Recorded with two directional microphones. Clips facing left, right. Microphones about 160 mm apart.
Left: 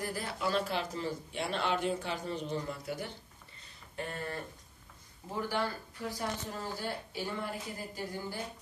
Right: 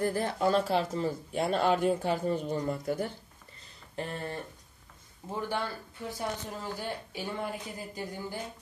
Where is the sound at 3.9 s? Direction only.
35° right (ahead or behind).